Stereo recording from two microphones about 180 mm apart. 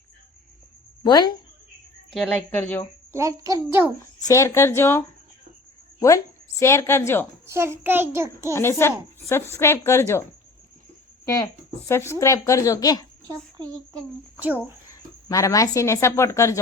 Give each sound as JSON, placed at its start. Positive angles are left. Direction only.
{"t": 1.0, "sound": "a woman's voice", "side_deg": 25}
{"t": 2.1, "sound": "speech", "side_deg": 5}
{"t": 3.1, "sound": "a child's voice", "side_deg": -15}
{"t": 4.3, "sound": "speech", "side_deg": 15}
{"t": 6.6, "sound": "speech", "side_deg": 15}
{"t": 7.4, "sound": "a child's voice", "side_deg": -15}
{"t": 8.5, "sound": "speech", "side_deg": 15}
{"t": 11.9, "sound": "speech", "side_deg": 15}
{"t": 13.2, "sound": "a woman's voice", "side_deg": -20}
{"t": 14.4, "sound": "a child's voice", "side_deg": -10}
{"t": 15.3, "sound": "speech", "side_deg": 20}